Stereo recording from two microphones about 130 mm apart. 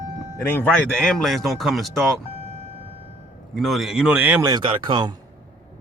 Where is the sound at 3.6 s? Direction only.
Centre (ahead or behind).